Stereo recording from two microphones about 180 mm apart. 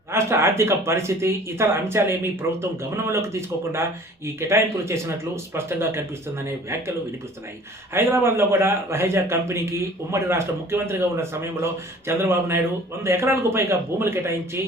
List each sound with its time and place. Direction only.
0.1 s a man's voice: 15° right (ahead or behind)
4.4 s a man's voice: 15° right (ahead or behind)
7.9 s a man's voice: 15° right (ahead or behind)